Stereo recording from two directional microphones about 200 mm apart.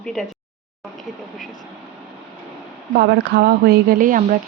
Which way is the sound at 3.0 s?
55° right (ahead or behind).